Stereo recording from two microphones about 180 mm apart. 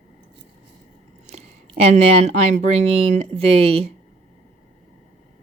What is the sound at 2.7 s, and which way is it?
Speech, 35° right (ahead or behind).